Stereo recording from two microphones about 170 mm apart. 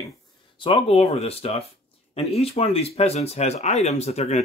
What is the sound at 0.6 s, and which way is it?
Speech, 35° left (ahead or behind).